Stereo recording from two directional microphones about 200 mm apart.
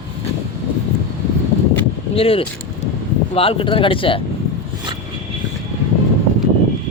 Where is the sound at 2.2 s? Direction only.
25° left (ahead or behind).